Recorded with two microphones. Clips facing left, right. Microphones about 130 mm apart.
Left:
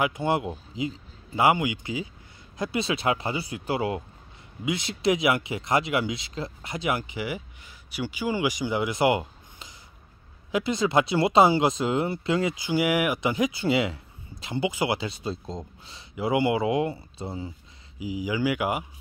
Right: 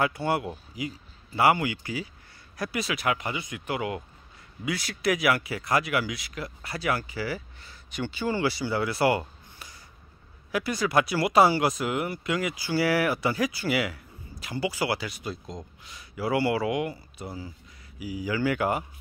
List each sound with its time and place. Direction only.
0.0 s speech: 20° left (ahead or behind)